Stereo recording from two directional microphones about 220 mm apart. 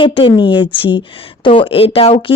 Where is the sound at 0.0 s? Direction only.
25° left (ahead or behind).